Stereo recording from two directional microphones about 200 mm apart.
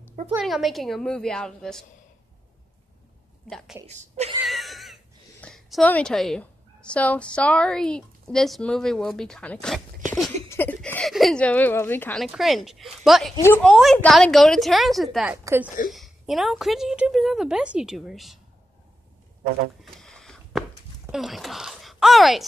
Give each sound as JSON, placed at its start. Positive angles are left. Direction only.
{"t": 0.3, "sound": "a woman's voice", "side_deg": 0}
{"t": 3.4, "sound": "a woman's voice", "side_deg": 0}
{"t": 3.8, "sound": "a sound", "side_deg": -35}
{"t": 4.5, "sound": "wheeze", "side_deg": 0}
{"t": 5.4, "sound": "a woman's voice", "side_deg": 0}
{"t": 15.3, "sound": "speech", "side_deg": -10}
{"t": 15.9, "sound": "a woman's voice", "side_deg": 0}
{"t": 19.8, "sound": "a sound", "side_deg": 0}
{"t": 21.1, "sound": "speech", "side_deg": 0}